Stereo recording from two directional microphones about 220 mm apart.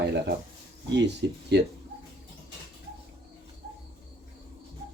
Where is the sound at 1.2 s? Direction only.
50° right (ahead or behind).